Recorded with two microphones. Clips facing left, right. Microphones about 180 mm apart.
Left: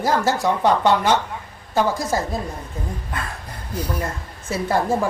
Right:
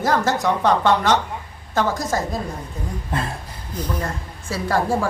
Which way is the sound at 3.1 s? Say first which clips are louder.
Right 4 dB; 30° right (ahead or behind).